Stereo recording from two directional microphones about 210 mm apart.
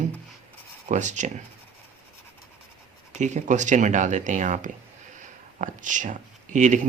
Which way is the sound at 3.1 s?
35° right (ahead or behind).